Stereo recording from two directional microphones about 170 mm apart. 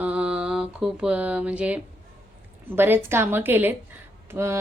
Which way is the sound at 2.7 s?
10° right (ahead or behind).